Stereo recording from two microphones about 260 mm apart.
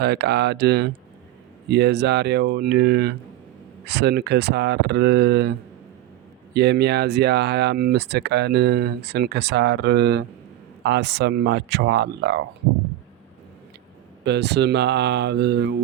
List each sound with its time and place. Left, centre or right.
0.0 s speech: right
14.3 s speech: right